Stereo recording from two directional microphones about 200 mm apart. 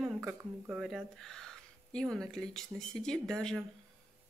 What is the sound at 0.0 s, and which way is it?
Speech, 10° right (ahead or behind).